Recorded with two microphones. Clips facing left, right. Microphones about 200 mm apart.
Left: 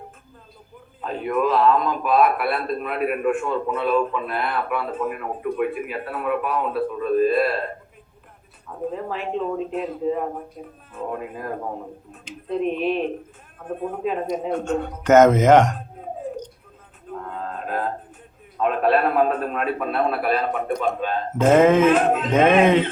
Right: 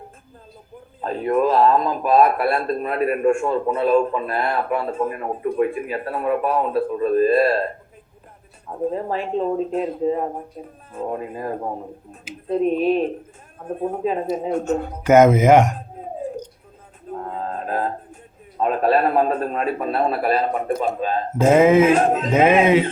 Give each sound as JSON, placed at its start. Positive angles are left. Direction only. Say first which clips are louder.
{"t": 1.0, "sound": "a man's voice", "louder": "right 3 dB", "side_deg": -40}
{"t": 8.9, "sound": "a man's voice", "louder": "right 2 dB", "side_deg": -35}
{"t": 14.3, "sound": "a man's voice", "louder": "right 2 dB", "side_deg": -5}
{"t": 17.1, "sound": "a sound", "louder": "right 3 dB", "side_deg": -35}
{"t": 18.5, "sound": "a man's voice", "louder": "right 1 dB", "side_deg": -35}
{"t": 21.3, "sound": "a man's voice", "louder": "right 1 dB", "side_deg": -10}
{"t": 22.0, "sound": "a man's voice", "louder": "right 1 dB", "side_deg": -40}
{"t": 22.3, "sound": "a man's voice", "louder": "even", "side_deg": -10}